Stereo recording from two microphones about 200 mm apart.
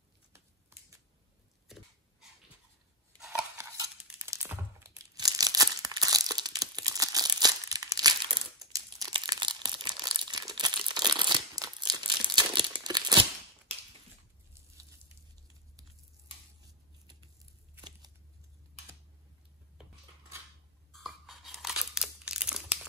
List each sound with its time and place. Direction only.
0.3 s shuffling cards: 15° right (ahead or behind)
4.0 s crumpling: 10° right (ahead or behind)
20.9 s tearing: centre (ahead or behind)